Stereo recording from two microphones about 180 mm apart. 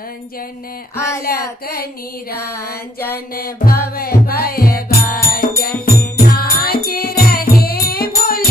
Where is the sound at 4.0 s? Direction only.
55° left (ahead or behind).